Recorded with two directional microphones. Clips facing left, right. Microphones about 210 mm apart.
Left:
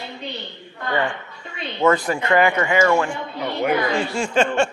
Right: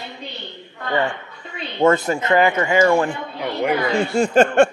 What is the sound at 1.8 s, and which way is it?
Speech, 25° right (ahead or behind).